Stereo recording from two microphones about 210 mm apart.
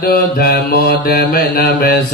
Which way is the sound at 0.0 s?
45° left (ahead or behind).